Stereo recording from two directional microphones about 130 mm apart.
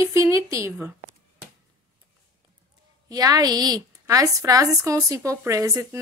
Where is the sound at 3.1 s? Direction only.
30° right (ahead or behind).